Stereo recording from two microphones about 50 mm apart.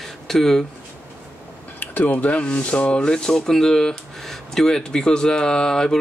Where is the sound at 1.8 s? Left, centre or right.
Left.